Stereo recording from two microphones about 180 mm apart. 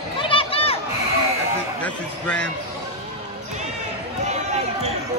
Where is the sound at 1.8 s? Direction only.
5° left (ahead or behind).